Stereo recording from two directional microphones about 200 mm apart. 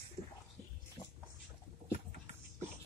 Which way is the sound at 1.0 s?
20° left (ahead or behind).